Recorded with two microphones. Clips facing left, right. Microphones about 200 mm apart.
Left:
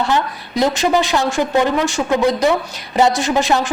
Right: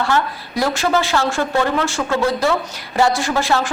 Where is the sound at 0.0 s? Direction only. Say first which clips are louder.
Left 1 dB; 20° left (ahead or behind).